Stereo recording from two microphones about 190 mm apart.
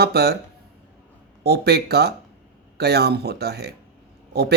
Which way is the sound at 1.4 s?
60° right (ahead or behind).